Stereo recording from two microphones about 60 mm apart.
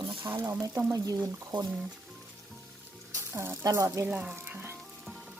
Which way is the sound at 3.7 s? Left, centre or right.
Right.